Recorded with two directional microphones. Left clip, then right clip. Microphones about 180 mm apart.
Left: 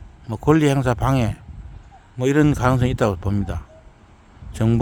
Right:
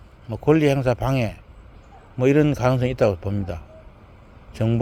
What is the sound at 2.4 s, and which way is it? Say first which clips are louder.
Speech: left 1 dB; 40° left (ahead or behind).